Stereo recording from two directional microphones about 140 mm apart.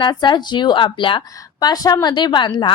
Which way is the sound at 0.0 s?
35° left (ahead or behind).